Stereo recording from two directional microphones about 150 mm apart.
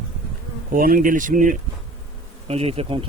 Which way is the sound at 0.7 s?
70° right (ahead or behind).